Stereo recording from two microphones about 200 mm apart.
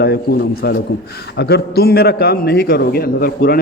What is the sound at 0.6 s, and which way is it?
A man's voice, 55° left (ahead or behind).